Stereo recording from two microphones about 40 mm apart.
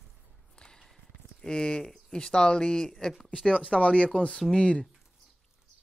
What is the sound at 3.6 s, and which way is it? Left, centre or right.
Speech, left.